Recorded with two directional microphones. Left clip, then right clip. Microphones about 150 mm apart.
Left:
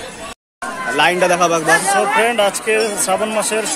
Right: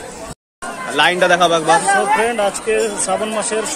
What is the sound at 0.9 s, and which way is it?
A man's voice, 20° left (ahead or behind).